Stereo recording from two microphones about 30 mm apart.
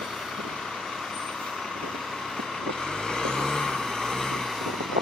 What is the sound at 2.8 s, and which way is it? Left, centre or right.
Vehicle, centre.